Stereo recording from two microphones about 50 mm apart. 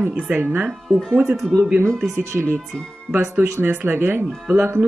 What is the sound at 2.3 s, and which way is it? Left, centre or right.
Speech, right.